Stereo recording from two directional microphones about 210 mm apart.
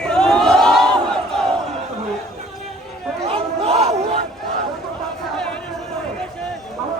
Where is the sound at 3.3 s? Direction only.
30° right (ahead or behind).